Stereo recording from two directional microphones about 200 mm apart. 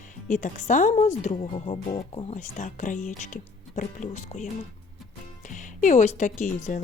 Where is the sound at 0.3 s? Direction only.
40° left (ahead or behind).